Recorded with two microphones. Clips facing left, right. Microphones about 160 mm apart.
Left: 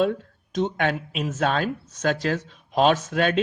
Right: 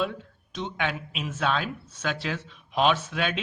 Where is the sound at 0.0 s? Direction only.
45° left (ahead or behind).